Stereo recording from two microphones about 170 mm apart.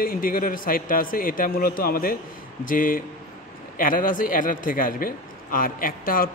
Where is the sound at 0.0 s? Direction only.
55° left (ahead or behind).